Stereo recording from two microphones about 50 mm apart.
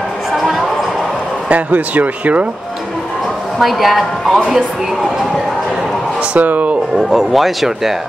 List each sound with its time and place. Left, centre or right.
0.4 s a sound: centre
1.5 s speech: right
3.5 s a woman's voice: centre
6.3 s speech: right
7.0 s a woman's voice: centre